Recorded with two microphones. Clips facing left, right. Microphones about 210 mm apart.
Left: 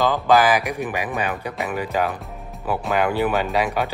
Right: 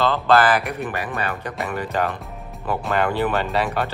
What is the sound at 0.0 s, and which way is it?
Speech, 15° left (ahead or behind).